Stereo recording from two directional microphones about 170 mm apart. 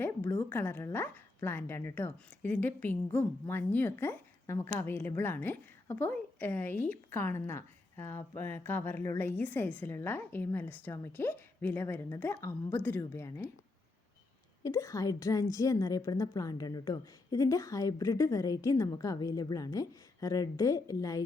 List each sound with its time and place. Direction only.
0.0 s a woman's voice: 10° left (ahead or behind)
14.6 s a woman's voice: 20° left (ahead or behind)